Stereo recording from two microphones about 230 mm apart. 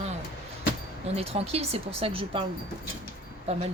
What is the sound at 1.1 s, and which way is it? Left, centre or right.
Speech, right.